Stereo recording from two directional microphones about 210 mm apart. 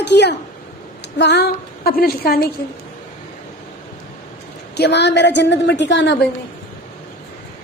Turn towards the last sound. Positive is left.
turn(degrees=55)  # may be behind; listen again after turning